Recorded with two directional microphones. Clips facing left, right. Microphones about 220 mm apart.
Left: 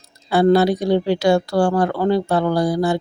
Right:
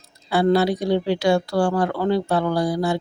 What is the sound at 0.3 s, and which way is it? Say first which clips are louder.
Speech: left 4 dB; 45° left (ahead or behind).